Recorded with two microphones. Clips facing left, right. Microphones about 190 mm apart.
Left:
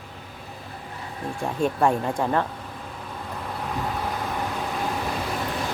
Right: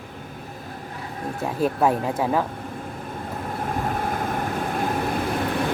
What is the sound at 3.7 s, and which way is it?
Vehicle, 50° right (ahead or behind).